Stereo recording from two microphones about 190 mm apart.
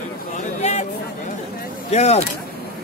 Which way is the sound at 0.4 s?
35° left (ahead or behind).